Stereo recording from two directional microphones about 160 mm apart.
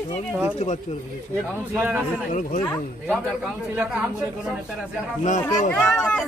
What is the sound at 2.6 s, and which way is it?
Speech, 10° left (ahead or behind).